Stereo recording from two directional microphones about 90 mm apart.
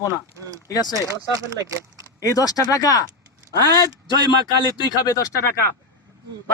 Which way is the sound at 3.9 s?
50° right (ahead or behind).